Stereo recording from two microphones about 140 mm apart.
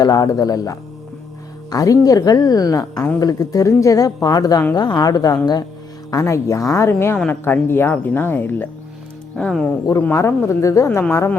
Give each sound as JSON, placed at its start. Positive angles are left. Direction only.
{"t": 0.0, "sound": "a woman's voice", "side_deg": 25}
{"t": 9.3, "sound": "speech", "side_deg": 5}
{"t": 10.0, "sound": "a woman's voice", "side_deg": 20}